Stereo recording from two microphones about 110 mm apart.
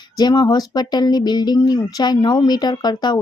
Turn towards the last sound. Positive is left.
turn(degrees=40)  # may be behind; listen again after turning